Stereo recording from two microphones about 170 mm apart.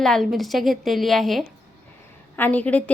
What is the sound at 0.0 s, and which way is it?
A woman's voice, centre (ahead or behind).